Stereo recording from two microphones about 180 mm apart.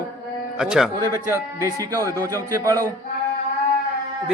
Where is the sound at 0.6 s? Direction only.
5° right (ahead or behind).